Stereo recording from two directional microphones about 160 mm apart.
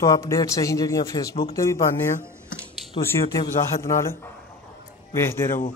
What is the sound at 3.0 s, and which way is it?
Speech, 20° left (ahead or behind).